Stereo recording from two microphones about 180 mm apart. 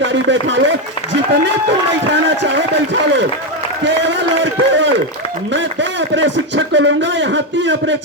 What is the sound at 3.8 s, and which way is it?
Speech, 90° right.